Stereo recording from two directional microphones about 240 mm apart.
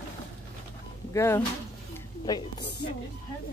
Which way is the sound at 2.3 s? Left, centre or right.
Centre.